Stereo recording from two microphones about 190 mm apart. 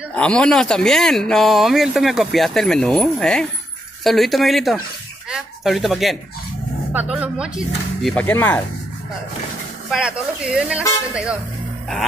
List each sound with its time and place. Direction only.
0.1 s speech: 5° left (ahead or behind)
5.3 s a sound: centre (ahead or behind)
6.9 s speech: 10° right (ahead or behind); by 8.6 s 10° left (ahead or behind)
9.8 s speech: 5° right (ahead or behind)